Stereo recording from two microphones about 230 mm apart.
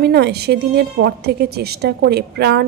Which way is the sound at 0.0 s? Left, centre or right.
Right.